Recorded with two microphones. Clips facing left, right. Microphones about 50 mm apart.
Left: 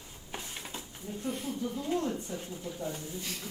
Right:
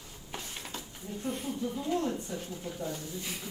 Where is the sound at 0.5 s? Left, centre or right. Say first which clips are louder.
Even; left.